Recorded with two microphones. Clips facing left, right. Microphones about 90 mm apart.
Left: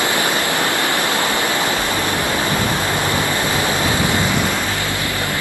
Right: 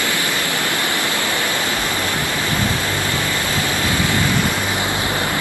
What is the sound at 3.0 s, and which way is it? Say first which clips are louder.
Waves: left 3 dB; 20° left (ahead or behind).